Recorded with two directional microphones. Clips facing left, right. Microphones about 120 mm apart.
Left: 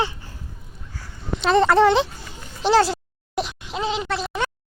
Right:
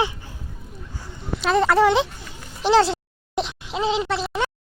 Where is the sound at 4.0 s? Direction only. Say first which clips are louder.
Right 2 dB; 5° right (ahead or behind).